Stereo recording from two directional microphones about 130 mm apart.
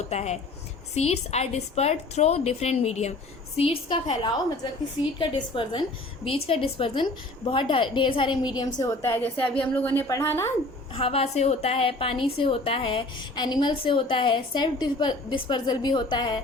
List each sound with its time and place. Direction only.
0.1 s a woman's voice: 60° left (ahead or behind)
3.6 s a woman's voice: 45° left (ahead or behind); by 10.5 s 20° left (ahead or behind)
10.9 s a woman's voice: 45° left (ahead or behind)